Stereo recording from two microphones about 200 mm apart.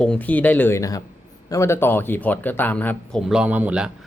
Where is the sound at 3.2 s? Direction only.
5° right (ahead or behind).